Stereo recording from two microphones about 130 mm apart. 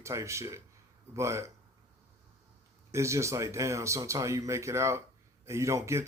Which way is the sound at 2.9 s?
20° right (ahead or behind).